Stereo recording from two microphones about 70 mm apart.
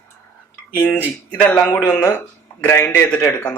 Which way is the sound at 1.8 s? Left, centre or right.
Centre.